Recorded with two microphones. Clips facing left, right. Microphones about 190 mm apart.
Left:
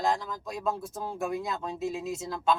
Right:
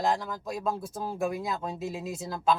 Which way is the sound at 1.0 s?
Centre (ahead or behind).